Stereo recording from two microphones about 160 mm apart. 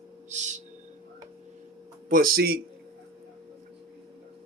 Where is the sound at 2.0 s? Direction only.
65° right (ahead or behind).